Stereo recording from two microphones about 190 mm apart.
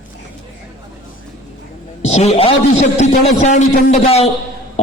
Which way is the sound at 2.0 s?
35° left (ahead or behind).